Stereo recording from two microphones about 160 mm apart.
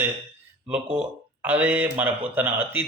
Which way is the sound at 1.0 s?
10° right (ahead or behind).